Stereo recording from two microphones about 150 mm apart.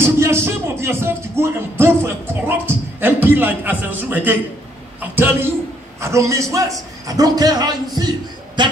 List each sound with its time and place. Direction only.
0.0 s a man's voice: 15° right (ahead or behind)